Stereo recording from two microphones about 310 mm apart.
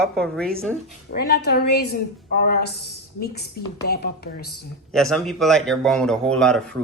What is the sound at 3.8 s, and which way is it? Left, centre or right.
Speech, left.